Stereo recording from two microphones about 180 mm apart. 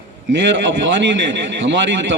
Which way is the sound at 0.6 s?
90° right.